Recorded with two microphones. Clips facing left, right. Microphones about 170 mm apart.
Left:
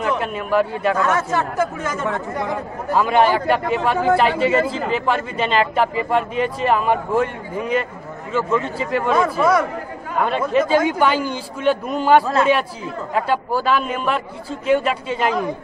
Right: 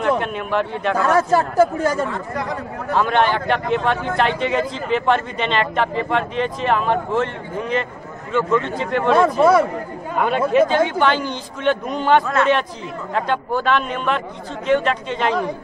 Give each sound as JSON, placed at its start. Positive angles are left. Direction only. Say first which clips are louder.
{"t": 0.2, "sound": "a man's voice", "louder": "left 2 dB", "side_deg": 5}
{"t": 1.0, "sound": "speech", "louder": "right 3 dB", "side_deg": -35}
{"t": 2.9, "sound": "a man's voice", "louder": "left 2 dB", "side_deg": 5}
{"t": 9.2, "sound": "a man's voice", "louder": "right 5 dB", "side_deg": -30}
{"t": 10.2, "sound": "a man's voice", "louder": "right 3 dB", "side_deg": 0}